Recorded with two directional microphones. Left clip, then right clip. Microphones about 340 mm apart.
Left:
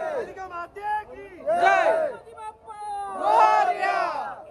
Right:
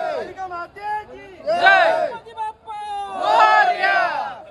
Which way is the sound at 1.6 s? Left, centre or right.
Centre.